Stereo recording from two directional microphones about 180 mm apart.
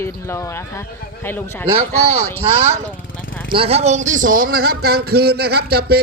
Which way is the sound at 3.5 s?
30° right (ahead or behind).